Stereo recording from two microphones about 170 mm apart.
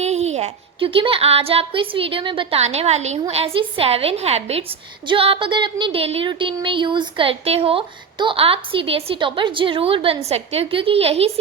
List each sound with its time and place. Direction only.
0.0 s a woman's voice: 40° right (ahead or behind)